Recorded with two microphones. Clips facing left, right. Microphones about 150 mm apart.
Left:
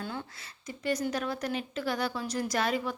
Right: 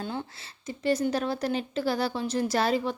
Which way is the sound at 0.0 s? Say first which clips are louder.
Right 4 dB; 25° right (ahead or behind).